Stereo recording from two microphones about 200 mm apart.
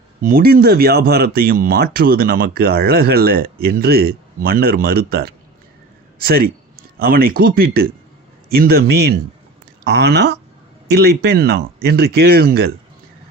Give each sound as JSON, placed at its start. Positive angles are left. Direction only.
{"t": 0.2, "sound": "speech", "side_deg": -45}